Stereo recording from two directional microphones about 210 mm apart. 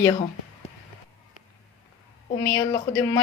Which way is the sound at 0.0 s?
25° left (ahead or behind).